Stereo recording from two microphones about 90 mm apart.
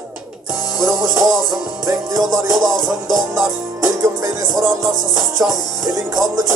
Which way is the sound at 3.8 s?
40° right (ahead or behind).